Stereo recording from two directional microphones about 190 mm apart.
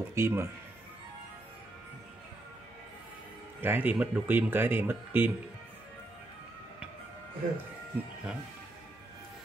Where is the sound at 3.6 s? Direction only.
10° right (ahead or behind).